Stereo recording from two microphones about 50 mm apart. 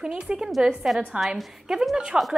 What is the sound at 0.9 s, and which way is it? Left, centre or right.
Speech, centre.